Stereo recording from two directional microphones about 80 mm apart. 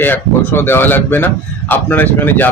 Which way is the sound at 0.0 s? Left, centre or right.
Left.